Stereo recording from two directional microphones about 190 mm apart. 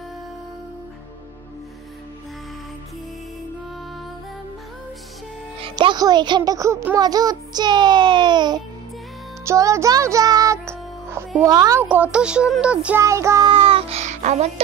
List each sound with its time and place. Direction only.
5.6 s speech: 25° right (ahead or behind)
9.4 s music: 15° right (ahead or behind)
11.4 s speech: 20° right (ahead or behind)
11.8 s music: 10° right (ahead or behind)
13.5 s music: 30° right (ahead or behind)